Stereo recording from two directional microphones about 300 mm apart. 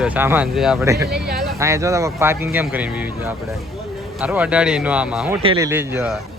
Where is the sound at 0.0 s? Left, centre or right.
Centre.